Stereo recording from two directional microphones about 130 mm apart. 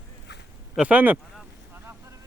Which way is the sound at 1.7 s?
15° right (ahead or behind).